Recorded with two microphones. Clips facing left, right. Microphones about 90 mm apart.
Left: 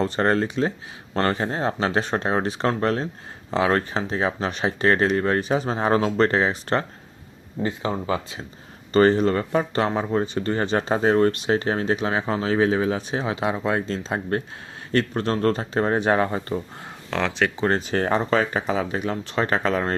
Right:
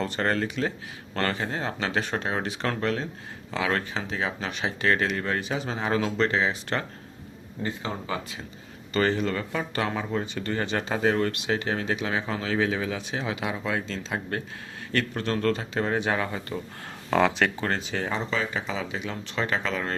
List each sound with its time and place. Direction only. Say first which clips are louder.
0.0 s speech: left 5 dB; 35° left (ahead or behind)
8.0 s speech: left 6 dB; 30° left (ahead or behind)
8.9 s speech: left 8 dB; 40° left (ahead or behind)
17.1 s speech: right 1 dB; 5° right (ahead or behind)
17.7 s speech: left 7 dB; 45° left (ahead or behind)